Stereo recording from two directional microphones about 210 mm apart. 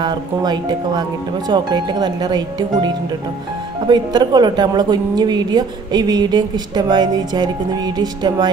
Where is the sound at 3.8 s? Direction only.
20° right (ahead or behind).